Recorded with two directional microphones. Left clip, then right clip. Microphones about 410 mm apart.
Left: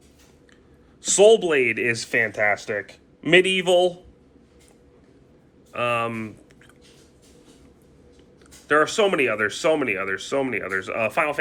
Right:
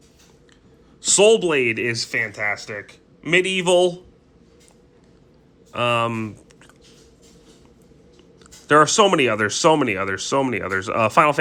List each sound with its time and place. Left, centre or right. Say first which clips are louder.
1.0 s speech: even; centre
2.4 s speech: left 3 dB; left
2.8 s speech: left 3 dB; centre
5.7 s speech: right 3 dB; centre
8.6 s speech: right 5 dB; centre